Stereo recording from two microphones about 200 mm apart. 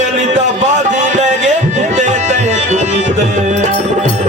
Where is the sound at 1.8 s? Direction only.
35° right (ahead or behind).